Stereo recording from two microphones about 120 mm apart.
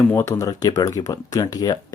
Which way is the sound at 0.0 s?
20° left (ahead or behind).